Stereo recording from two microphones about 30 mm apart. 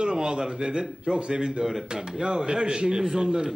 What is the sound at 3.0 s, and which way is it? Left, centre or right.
Speech, centre.